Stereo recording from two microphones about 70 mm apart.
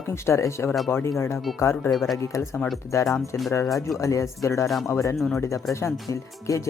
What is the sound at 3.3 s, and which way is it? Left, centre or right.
Speech, left.